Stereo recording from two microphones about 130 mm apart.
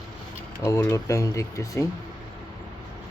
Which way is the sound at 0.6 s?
25° left (ahead or behind).